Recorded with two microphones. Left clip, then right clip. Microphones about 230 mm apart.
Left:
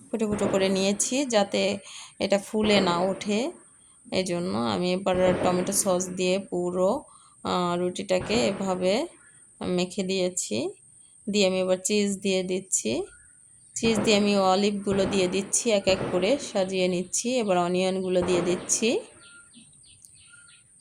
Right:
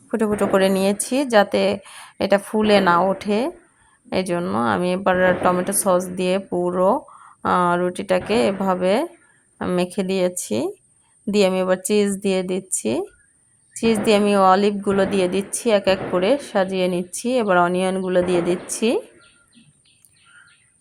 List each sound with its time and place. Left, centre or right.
0.1 s a woman's voice: centre